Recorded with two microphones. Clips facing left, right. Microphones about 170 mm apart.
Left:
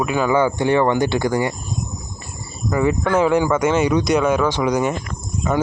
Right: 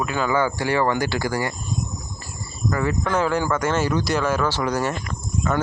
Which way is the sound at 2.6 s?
15° left (ahead or behind).